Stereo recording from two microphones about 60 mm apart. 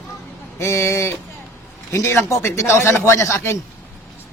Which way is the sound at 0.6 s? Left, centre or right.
Left.